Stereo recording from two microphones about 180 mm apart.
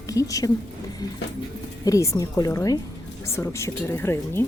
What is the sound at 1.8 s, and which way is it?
A woman's voice, 20° left (ahead or behind).